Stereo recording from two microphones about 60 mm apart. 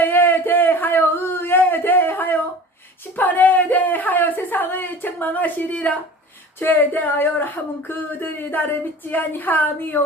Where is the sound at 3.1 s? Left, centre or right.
Left.